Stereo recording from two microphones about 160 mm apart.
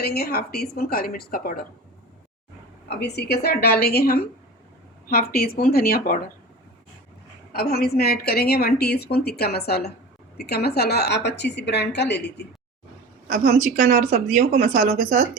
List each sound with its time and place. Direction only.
0.0 s a woman's voice: 80° left
3.0 s a woman's voice: 90° left; by 6.1 s 70° left (ahead or behind)
7.5 s a woman's voice: 75° left (ahead or behind)
13.2 s a woman's voice: 65° right (ahead or behind)